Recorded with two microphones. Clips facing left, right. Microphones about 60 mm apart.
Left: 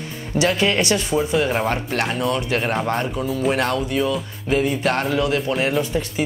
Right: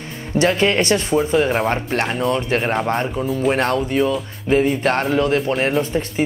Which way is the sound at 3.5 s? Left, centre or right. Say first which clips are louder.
Right 3 dB; right.